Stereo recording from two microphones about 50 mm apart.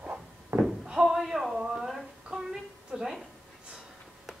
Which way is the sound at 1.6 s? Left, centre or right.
Centre.